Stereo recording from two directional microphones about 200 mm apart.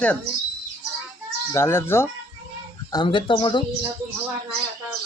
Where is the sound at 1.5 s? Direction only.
10° left (ahead or behind).